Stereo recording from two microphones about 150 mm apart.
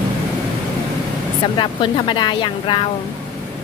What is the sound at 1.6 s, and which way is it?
Speech, 30° left (ahead or behind).